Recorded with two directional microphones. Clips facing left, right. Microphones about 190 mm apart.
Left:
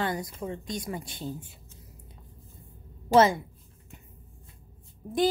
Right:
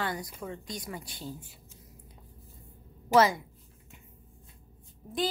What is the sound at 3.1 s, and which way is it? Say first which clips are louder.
Speech: left 3 dB; 25° left (ahead or behind).